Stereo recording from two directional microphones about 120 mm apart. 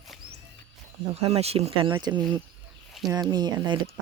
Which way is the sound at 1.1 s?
60° right (ahead or behind).